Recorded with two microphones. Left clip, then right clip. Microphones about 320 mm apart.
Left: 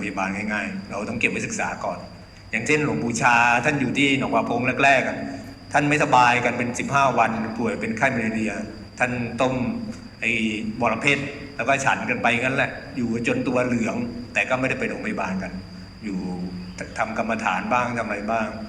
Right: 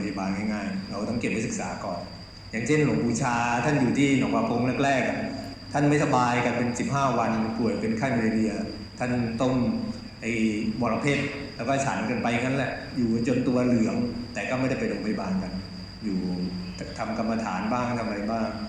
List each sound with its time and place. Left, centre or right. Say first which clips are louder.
0.0 s a man's voice: left 4 dB; left
17.2 s a man's voice: left 5 dB; left